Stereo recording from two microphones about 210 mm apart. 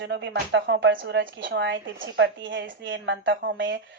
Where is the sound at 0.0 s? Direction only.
55° right (ahead or behind).